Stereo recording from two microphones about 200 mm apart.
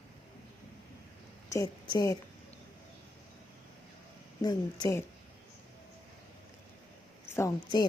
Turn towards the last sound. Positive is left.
turn(degrees=20)  # may be behind; listen again after turning